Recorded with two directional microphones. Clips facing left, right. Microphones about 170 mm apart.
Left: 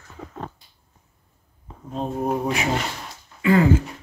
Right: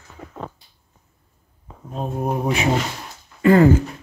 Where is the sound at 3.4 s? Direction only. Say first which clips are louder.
Right 4 dB; 45° right (ahead or behind).